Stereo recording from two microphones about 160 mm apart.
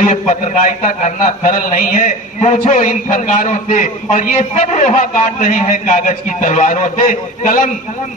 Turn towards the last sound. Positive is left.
turn(degrees=40)  # may be behind; listen again after turning